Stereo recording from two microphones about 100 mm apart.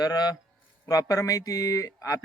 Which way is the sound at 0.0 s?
40° left (ahead or behind).